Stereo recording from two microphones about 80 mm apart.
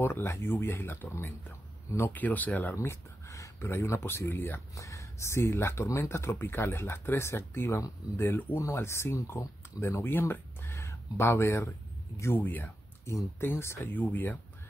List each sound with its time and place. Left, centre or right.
0.0 s speech: left
2.7 s speech: left
4.7 s speech: left
8.5 s speech: left
12.2 s speech: left
13.0 s speech: left